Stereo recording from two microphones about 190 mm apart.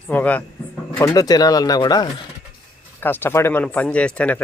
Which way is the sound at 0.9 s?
20° left (ahead or behind).